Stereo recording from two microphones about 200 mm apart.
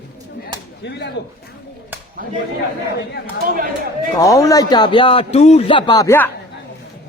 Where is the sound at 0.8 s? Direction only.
55° left (ahead or behind).